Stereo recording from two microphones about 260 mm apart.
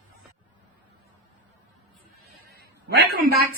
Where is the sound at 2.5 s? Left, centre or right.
Right.